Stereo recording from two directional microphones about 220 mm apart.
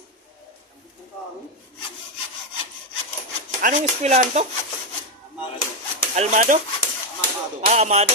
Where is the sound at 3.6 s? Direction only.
30° right (ahead or behind).